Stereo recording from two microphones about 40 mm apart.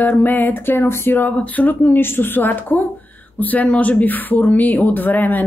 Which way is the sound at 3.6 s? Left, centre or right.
Left.